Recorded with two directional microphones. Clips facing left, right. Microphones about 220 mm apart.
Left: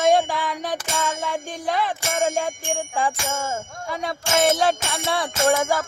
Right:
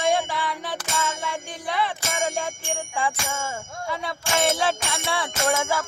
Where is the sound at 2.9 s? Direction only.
45° left (ahead or behind).